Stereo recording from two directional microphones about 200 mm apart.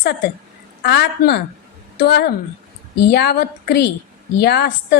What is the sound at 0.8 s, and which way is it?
A woman's voice, 55° left (ahead or behind).